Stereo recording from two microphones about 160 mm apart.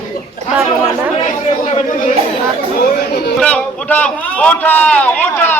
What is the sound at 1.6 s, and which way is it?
Speech, 45° left (ahead or behind).